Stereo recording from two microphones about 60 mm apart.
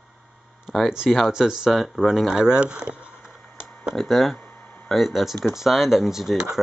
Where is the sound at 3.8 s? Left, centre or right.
Centre.